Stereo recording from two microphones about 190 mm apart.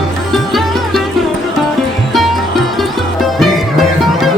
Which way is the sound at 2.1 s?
Centre (ahead or behind).